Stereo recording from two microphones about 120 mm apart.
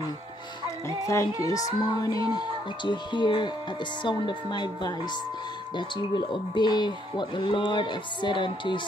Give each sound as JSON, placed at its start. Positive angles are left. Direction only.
{"t": 0.8, "sound": "music", "side_deg": 25}
{"t": 2.2, "sound": "speech", "side_deg": 35}